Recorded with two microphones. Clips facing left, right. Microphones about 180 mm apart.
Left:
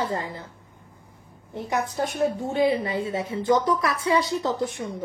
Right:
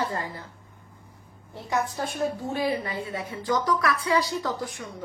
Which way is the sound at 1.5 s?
20° left (ahead or behind).